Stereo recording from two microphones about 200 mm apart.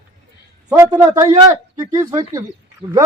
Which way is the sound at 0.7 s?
20° right (ahead or behind).